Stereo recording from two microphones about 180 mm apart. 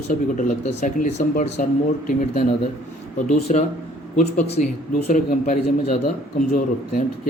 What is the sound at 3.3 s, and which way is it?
A man's voice, 35° left (ahead or behind).